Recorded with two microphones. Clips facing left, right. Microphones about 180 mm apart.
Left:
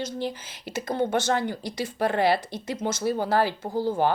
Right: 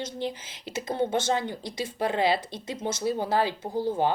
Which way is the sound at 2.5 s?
20° right (ahead or behind).